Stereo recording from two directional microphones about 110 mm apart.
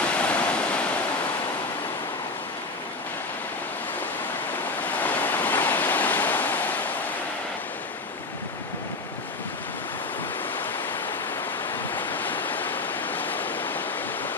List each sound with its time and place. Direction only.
0.2 s waves: 10° left (ahead or behind)
4.9 s waves: 15° left (ahead or behind)
11.9 s waves: 15° left (ahead or behind)